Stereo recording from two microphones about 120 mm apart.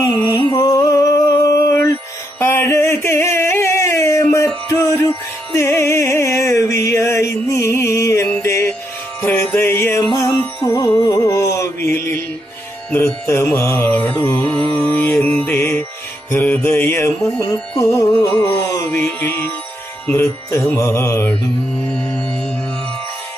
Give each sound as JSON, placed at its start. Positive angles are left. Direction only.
{"t": 0.3, "sound": "music", "side_deg": 30}
{"t": 2.4, "sound": "a sound", "side_deg": 20}
{"t": 5.5, "sound": "music", "side_deg": 20}
{"t": 10.7, "sound": "music", "side_deg": 30}
{"t": 13.9, "sound": "mantra", "side_deg": 10}
{"t": 14.3, "sound": "music", "side_deg": 10}